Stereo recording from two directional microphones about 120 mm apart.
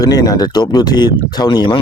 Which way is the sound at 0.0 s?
30° left (ahead or behind).